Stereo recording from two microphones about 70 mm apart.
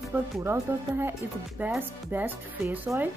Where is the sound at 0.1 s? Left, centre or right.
Right.